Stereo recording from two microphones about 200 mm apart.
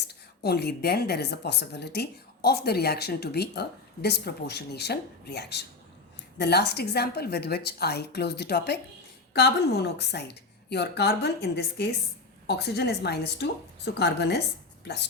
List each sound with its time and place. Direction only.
0.1 s a woman's voice: 55° left (ahead or behind)